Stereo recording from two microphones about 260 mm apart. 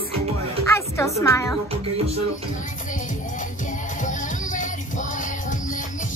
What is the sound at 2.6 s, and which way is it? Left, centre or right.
Music, left.